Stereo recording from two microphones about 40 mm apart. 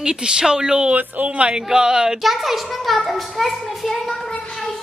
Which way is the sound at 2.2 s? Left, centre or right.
Centre.